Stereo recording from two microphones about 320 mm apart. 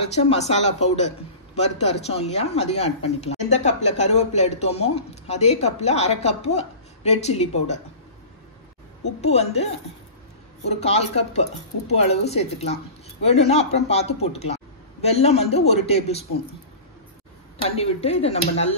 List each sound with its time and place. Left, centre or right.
0.1 s a man's voice: centre
9.2 s a man's voice: centre
10.7 s a man's voice: centre
17.6 s a man's voice: centre